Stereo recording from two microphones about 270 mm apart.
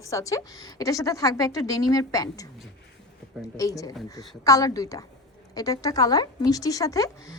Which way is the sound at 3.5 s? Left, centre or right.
Centre.